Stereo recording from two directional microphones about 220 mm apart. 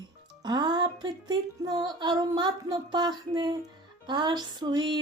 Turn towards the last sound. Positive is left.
turn(degrees=-20)  # may be behind; listen again after turning